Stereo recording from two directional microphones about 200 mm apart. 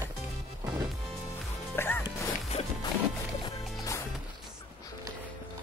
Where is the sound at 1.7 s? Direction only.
10° left (ahead or behind).